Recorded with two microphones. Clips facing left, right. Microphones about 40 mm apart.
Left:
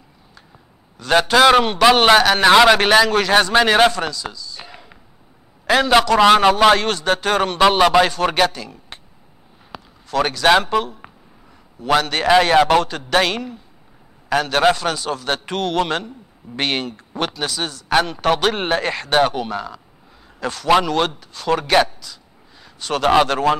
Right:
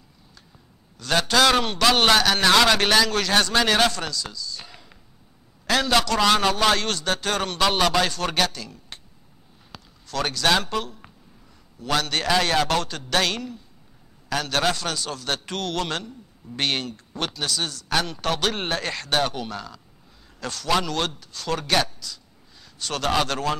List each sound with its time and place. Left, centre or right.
0.9 s a man's voice: centre